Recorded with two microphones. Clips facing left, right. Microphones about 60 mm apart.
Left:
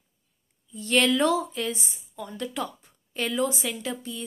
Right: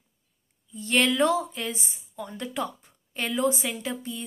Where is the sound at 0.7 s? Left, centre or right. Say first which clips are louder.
Left 1 dB; centre.